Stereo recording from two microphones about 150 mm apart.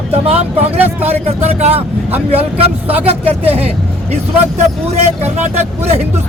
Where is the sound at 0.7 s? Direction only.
10° right (ahead or behind).